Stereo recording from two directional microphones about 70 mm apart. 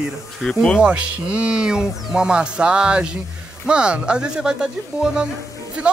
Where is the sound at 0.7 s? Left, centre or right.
Centre.